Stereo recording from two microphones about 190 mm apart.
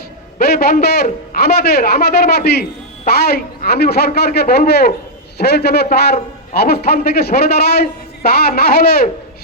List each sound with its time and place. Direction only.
0.3 s a man's voice: 55° left (ahead or behind)